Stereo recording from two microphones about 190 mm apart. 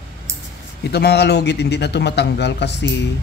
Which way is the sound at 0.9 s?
60° left (ahead or behind).